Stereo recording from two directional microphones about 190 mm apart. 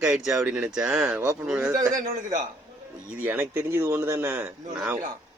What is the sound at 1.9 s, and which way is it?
Speech, 40° right (ahead or behind).